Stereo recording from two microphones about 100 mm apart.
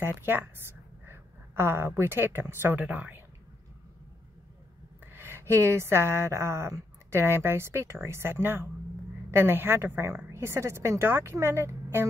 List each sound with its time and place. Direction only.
0.0 s a woman's voice: 25° right (ahead or behind)
5.0 s speech: 25° right (ahead or behind)